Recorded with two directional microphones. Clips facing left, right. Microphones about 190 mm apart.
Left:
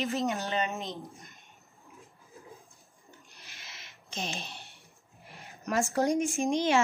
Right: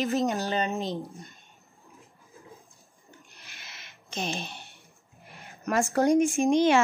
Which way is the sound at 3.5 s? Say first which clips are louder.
Right 1 dB; 55° right (ahead or behind).